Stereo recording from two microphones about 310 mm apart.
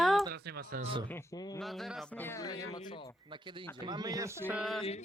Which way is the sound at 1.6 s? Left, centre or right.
Centre.